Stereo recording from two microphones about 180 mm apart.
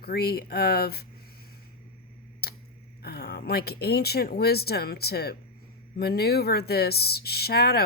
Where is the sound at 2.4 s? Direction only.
60° left (ahead or behind).